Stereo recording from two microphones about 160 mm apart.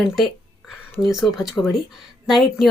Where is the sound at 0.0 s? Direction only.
Centre (ahead or behind).